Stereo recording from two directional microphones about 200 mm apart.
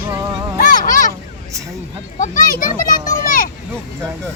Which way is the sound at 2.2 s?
40° left (ahead or behind).